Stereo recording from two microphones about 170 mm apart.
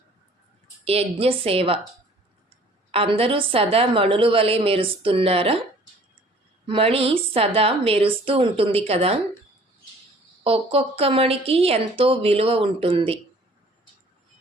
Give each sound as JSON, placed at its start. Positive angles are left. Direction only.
{"t": 0.9, "sound": "a woman's voice", "side_deg": -35}
{"t": 2.9, "sound": "a woman's voice", "side_deg": -35}
{"t": 6.7, "sound": "a woman's voice", "side_deg": -35}
{"t": 10.4, "sound": "a woman's voice", "side_deg": -35}